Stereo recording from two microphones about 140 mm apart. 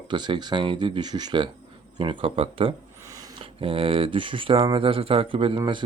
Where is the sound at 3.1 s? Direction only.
25° right (ahead or behind).